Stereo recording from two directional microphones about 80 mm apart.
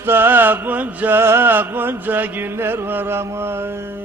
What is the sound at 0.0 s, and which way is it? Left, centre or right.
Mantra, right.